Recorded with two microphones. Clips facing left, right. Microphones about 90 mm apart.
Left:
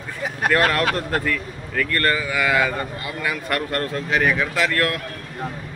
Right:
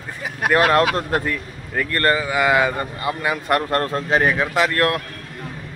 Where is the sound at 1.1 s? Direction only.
25° right (ahead or behind).